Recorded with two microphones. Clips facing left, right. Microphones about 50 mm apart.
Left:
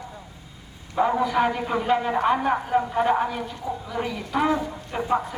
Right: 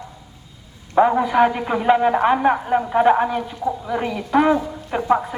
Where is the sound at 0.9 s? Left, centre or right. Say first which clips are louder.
Right 6 dB; right.